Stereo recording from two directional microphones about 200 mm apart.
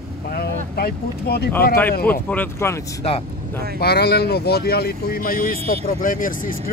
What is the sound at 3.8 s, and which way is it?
Speech, 55° left (ahead or behind).